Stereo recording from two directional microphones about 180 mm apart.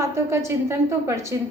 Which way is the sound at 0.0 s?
15° right (ahead or behind).